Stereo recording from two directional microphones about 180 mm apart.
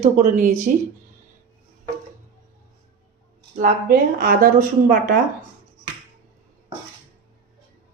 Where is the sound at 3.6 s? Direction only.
55° right (ahead or behind).